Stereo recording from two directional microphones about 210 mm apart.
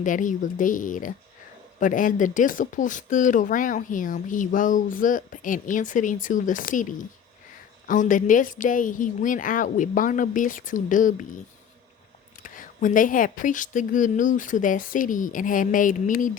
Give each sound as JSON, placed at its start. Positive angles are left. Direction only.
{"t": 0.0, "sound": "speech", "side_deg": 40}
{"t": 12.4, "sound": "speech", "side_deg": 40}